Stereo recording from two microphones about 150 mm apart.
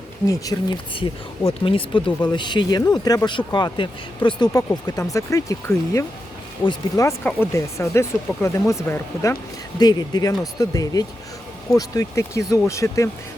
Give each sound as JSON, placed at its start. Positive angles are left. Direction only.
{"t": 0.3, "sound": "speech", "side_deg": 25}